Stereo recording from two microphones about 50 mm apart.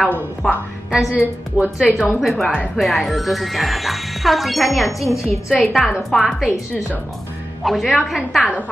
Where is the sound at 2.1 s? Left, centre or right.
Centre.